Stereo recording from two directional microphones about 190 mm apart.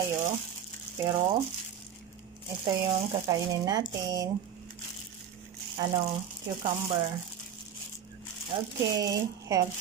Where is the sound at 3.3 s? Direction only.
20° right (ahead or behind).